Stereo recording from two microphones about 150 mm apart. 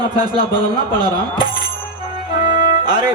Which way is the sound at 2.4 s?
30° right (ahead or behind).